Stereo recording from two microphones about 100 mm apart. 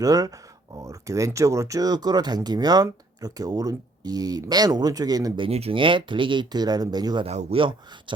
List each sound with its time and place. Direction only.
0.0 s speech: 35° right (ahead or behind)
5.4 s speech: 85° right; by 7.3 s 45° right (ahead or behind)
7.3 s speech: 60° right (ahead or behind)